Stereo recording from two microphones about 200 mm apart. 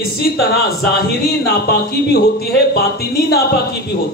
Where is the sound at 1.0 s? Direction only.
50° left (ahead or behind).